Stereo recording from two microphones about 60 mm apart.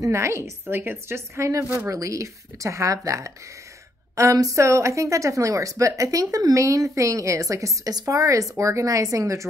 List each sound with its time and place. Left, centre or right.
0.1 s a woman's voice: right
1.9 s speech: right